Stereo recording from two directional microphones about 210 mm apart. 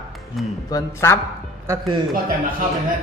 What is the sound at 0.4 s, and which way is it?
Speech, centre (ahead or behind).